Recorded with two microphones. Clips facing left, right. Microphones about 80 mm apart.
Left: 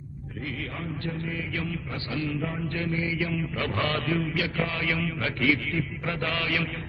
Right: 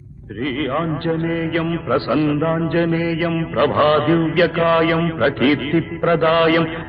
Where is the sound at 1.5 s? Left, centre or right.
Right.